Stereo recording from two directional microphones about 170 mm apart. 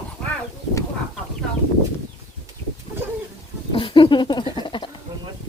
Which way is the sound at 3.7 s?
30° left (ahead or behind).